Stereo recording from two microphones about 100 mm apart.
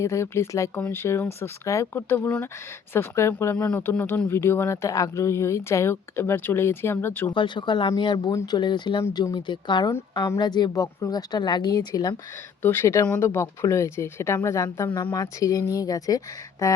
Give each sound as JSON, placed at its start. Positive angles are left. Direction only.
{"t": 0.0, "sound": "speech", "side_deg": 30}
{"t": 7.3, "sound": "speech", "side_deg": 50}
{"t": 8.5, "sound": "speech", "side_deg": 50}
{"t": 12.6, "sound": "speech", "side_deg": 25}